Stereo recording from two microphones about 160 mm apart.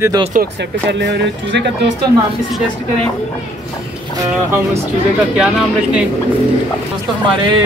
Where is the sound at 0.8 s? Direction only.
90° right.